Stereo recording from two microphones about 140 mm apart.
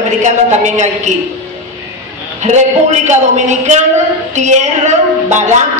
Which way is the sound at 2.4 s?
55° right (ahead or behind).